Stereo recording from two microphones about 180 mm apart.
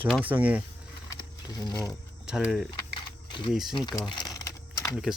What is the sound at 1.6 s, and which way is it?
Speech, 15° left (ahead or behind).